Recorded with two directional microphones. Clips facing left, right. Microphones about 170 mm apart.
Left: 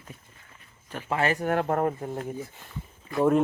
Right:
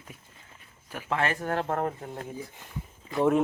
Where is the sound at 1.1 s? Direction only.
10° left (ahead or behind).